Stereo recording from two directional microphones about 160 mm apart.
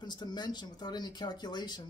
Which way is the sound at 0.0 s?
25° left (ahead or behind).